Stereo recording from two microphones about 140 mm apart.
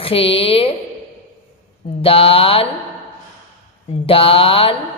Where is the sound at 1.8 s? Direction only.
40° left (ahead or behind).